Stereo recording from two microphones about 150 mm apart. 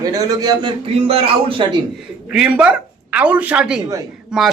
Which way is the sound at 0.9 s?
40° right (ahead or behind).